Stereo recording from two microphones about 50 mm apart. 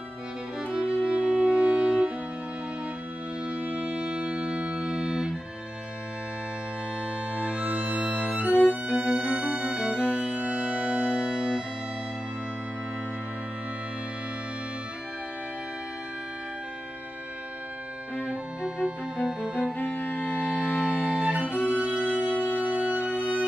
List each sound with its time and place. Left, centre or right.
0.8 s music: right
3.4 s music: right
3.8 s music: centre
7.3 s music: right
8.5 s music: left
8.9 s music: centre
9.3 s music: right
10.0 s organ: centre
18.2 s music: right
19.8 s music: left
21.0 s music: right
22.0 s music: left
22.6 s music: right